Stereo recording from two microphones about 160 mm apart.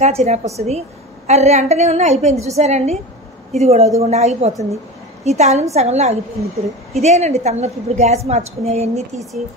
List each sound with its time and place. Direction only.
0.0 s a woman's voice: 45° right (ahead or behind)